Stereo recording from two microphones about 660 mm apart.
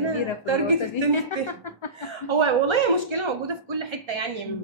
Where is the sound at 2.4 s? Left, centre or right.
Right.